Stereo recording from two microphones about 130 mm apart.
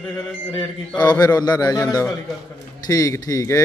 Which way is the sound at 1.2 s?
30° left (ahead or behind).